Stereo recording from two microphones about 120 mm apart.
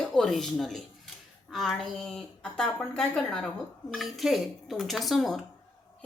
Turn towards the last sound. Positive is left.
turn(degrees=0)  # may be behind; listen again after turning